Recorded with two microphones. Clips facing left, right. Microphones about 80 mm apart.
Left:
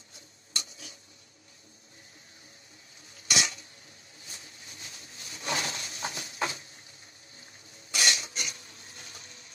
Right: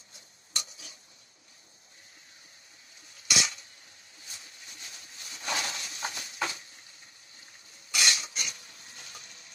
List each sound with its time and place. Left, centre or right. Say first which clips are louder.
3.3 s creak: left 1 dB; left
4.3 s wood: left 1 dB; left
7.9 s cough: even; left